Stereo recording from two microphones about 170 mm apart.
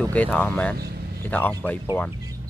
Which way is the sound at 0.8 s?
65° right (ahead or behind).